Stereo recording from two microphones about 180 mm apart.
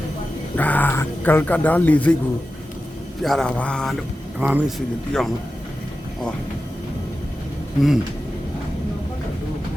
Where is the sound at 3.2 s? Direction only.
5° left (ahead or behind).